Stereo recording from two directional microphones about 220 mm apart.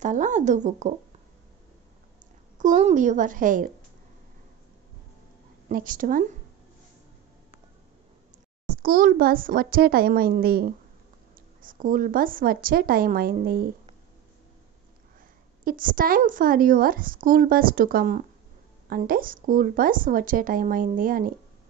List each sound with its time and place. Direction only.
0.0 s a woman's voice: 35° right (ahead or behind)
2.6 s a woman's voice: 35° right (ahead or behind)
5.7 s a woman's voice: 40° right (ahead or behind)
8.6 s a woman's voice: 40° right (ahead or behind)
15.6 s a woman's voice: 40° right (ahead or behind)